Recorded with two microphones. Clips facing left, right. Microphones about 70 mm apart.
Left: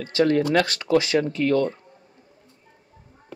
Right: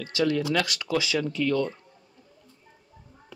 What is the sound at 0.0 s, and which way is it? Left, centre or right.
Speech, left.